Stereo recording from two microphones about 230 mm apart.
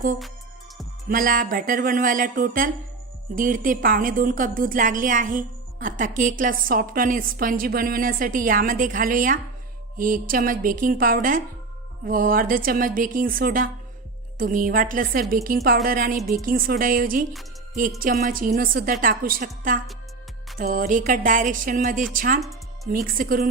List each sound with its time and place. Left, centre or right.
1.0 s a woman's voice: right
22.4 s music: centre
22.9 s a woman's voice: right